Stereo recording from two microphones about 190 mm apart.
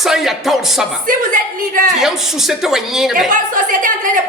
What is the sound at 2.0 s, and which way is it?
Speech, centre (ahead or behind).